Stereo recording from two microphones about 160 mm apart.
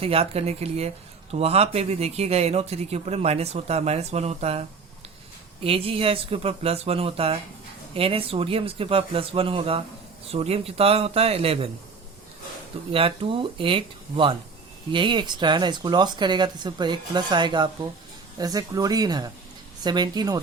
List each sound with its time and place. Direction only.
0.0 s speech: 40° right (ahead or behind)
5.6 s speech: 35° right (ahead or behind)
12.9 s speech: 35° right (ahead or behind)